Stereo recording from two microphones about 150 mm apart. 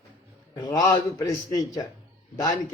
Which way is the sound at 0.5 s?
25° left (ahead or behind).